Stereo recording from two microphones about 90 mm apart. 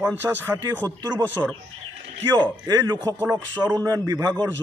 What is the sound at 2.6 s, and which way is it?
A man's voice, 40° right (ahead or behind).